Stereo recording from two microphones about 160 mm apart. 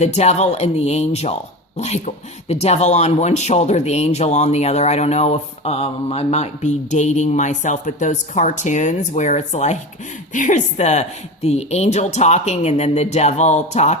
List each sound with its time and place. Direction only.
0.0 s speech: 45° left (ahead or behind)